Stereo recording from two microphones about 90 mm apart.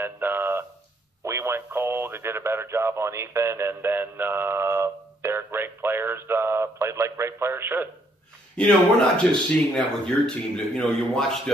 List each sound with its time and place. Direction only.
0.0 s a sound: 25° right (ahead or behind)
1.2 s radio: 30° right (ahead or behind)
8.5 s a man's voice: 10° left (ahead or behind)